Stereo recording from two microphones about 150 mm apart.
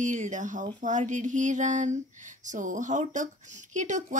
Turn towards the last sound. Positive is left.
turn(degrees=-55)  # may be behind; listen again after turning